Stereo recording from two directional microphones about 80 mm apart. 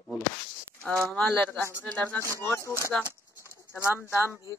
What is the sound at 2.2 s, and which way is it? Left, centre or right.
Speech, right.